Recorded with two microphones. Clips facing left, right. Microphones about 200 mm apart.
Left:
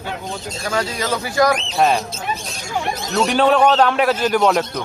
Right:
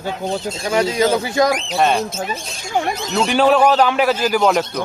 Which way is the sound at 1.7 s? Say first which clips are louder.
Even; centre (ahead or behind).